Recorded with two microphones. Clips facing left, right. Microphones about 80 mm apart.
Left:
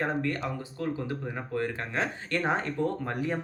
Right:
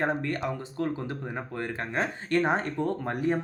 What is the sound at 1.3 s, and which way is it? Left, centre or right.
Speech, right.